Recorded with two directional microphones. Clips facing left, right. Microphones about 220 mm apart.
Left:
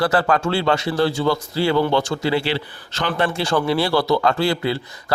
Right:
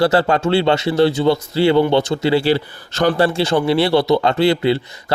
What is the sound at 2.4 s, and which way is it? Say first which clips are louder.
Speech: right 7 dB; 45° right (ahead or behind).